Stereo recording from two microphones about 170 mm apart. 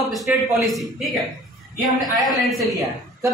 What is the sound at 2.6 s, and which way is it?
Speech, 20° right (ahead or behind).